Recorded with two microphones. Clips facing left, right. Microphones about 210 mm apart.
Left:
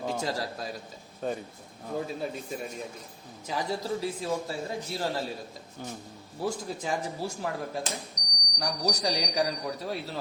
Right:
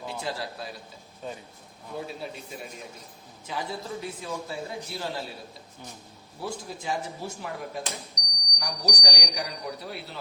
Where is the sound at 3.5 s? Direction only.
40° left (ahead or behind).